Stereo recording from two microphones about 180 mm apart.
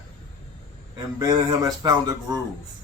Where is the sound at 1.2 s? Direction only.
20° right (ahead or behind).